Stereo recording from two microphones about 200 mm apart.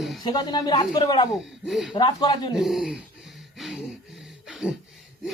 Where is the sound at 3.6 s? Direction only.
Centre (ahead or behind).